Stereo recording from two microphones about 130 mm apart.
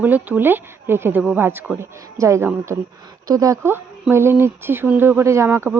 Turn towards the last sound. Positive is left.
turn(degrees=-20)  # may be behind; listen again after turning